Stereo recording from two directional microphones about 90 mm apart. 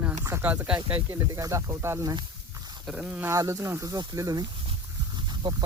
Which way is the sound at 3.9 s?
45° right (ahead or behind).